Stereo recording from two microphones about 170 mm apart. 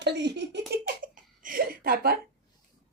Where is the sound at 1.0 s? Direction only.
55° right (ahead or behind).